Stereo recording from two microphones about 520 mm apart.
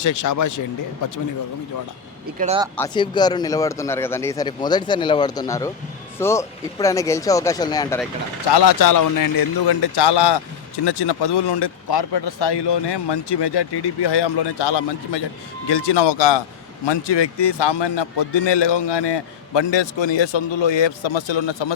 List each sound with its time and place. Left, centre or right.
0.0 s speech: left
2.4 s speech: centre
2.7 s speech: centre
8.5 s a man's voice: left